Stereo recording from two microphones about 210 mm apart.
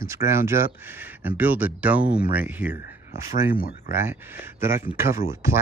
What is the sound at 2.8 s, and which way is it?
Speech, 45° left (ahead or behind).